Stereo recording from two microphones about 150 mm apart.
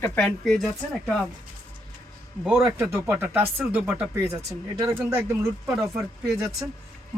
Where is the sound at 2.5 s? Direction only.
15° right (ahead or behind).